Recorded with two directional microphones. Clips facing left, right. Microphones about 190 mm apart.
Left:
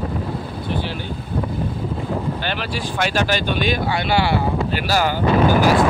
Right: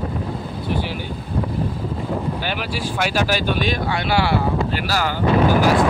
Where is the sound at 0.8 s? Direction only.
10° right (ahead or behind).